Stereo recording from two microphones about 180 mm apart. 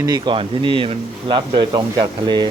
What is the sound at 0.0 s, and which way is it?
Speech, 25° right (ahead or behind).